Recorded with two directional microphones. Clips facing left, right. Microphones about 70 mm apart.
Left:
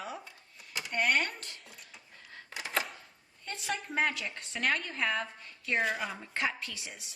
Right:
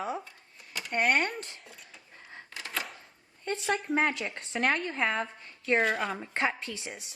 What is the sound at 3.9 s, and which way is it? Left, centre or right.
A woman's voice, right.